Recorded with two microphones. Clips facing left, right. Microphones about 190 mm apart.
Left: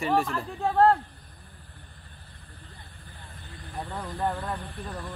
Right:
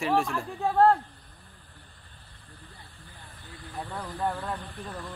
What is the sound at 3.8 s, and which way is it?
Speech, 20° left (ahead or behind).